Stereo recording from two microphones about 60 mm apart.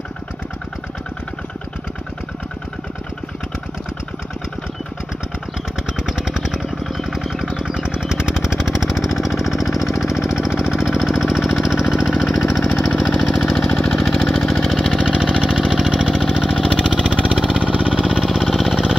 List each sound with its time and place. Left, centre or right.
6.0 s vehicle: centre
7.5 s a sound: centre
9.8 s jackhammer: left
10.6 s vehicle: left
11.3 s jackhammer: centre
12.4 s engine: centre
17.6 s vehicle: centre